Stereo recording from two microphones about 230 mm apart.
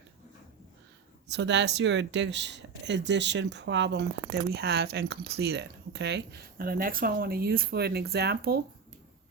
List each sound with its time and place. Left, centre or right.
1.3 s speech: right